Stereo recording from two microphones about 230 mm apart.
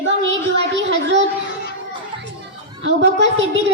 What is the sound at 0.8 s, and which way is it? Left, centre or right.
Speech, right.